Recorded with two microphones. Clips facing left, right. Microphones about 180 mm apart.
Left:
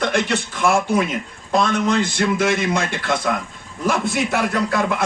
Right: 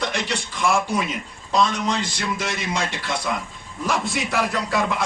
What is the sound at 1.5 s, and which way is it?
Speech, 55° left (ahead or behind).